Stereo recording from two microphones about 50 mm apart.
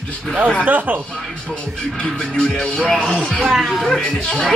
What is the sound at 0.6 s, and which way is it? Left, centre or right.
Speech, right.